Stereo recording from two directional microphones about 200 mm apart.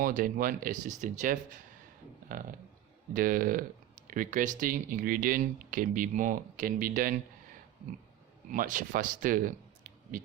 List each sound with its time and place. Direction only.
0.0 s speech: 45° right (ahead or behind)
8.5 s speech: 40° right (ahead or behind)